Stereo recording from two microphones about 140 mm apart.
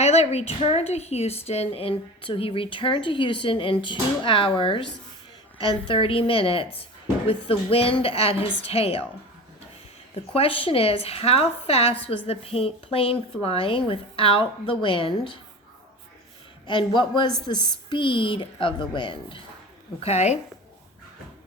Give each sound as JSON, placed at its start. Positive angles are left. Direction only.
{"t": 0.0, "sound": "a woman's voice", "side_deg": 50}
{"t": 10.3, "sound": "a woman's voice", "side_deg": 40}
{"t": 16.6, "sound": "a woman's voice", "side_deg": 35}
{"t": 20.0, "sound": "a woman's voice", "side_deg": 50}